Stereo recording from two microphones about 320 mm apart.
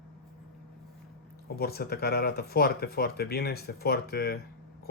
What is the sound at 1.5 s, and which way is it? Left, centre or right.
Speech, left.